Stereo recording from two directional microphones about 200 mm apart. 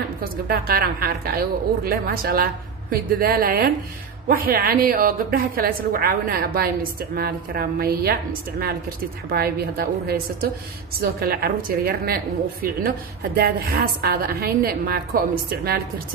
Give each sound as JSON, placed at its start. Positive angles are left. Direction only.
{"t": 0.2, "sound": "a woman's voice", "side_deg": -50}
{"t": 13.4, "sound": "a woman's voice", "side_deg": -50}